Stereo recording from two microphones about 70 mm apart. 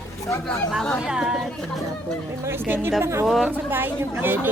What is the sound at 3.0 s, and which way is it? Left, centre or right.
A woman's voice, right.